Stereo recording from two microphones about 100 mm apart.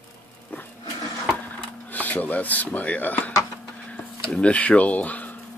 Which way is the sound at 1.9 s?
15° left (ahead or behind).